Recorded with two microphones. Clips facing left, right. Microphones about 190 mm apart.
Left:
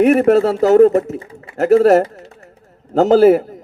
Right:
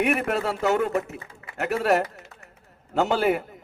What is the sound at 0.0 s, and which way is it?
A man's voice, 40° left (ahead or behind).